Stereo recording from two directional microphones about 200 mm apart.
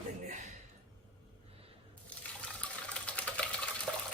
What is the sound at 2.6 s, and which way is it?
Water, 5° left (ahead or behind).